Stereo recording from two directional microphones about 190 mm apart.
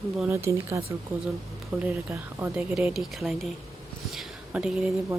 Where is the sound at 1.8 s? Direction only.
5° right (ahead or behind).